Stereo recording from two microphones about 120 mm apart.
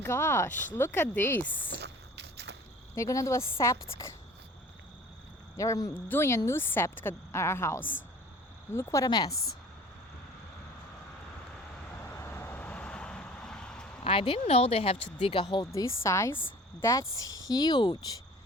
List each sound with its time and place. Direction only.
0.0 s a woman's voice: 20° left (ahead or behind)
2.9 s a woman's voice: 25° left (ahead or behind)
5.5 s a woman's voice: 30° left (ahead or behind)
12.1 s vehicle: 20° left (ahead or behind)
14.0 s speech: 50° left (ahead or behind)
15.2 s speech: 45° left (ahead or behind)
15.7 s a woman's voice: 25° left (ahead or behind)